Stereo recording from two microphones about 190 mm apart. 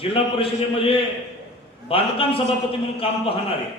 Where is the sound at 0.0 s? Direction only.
30° left (ahead or behind).